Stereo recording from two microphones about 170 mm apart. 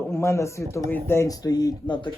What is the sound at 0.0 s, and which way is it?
Speech, 15° left (ahead or behind).